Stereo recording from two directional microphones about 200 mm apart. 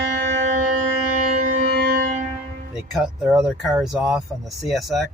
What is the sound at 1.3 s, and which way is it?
Music, 40° right (ahead or behind).